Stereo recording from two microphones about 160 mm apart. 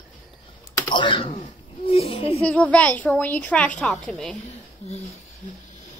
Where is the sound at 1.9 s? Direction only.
40° left (ahead or behind).